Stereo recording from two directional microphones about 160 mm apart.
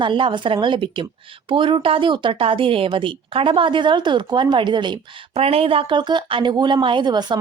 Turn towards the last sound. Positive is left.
turn(degrees=-30)  # may be behind; listen again after turning